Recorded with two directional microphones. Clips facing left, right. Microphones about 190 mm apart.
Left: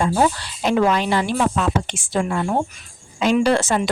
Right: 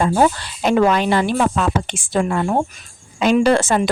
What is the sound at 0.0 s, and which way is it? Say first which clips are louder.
A woman's voice: right 3 dB; 50° right (ahead or behind).